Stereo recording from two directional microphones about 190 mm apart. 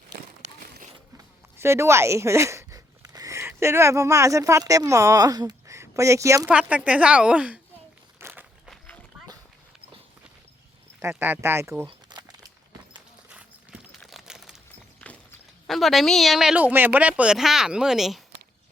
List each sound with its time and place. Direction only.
0.6 s a sound: 50° right (ahead or behind)
1.1 s speech: 15° right (ahead or behind)
8.2 s walk: 10° right (ahead or behind)
11.0 s speech: 10° right (ahead or behind)
11.9 s crumpling: 25° right (ahead or behind)
13.7 s a sound: 5° right (ahead or behind)
15.0 s speech: 5° left (ahead or behind)